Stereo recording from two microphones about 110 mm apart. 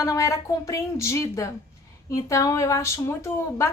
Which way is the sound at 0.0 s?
30° left (ahead or behind).